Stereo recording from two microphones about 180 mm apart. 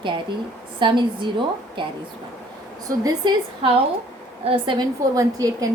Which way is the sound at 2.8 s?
20° right (ahead or behind).